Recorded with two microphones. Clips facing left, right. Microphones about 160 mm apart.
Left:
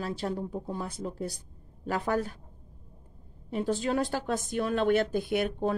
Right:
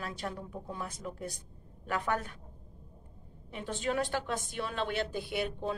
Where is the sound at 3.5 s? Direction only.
35° left (ahead or behind).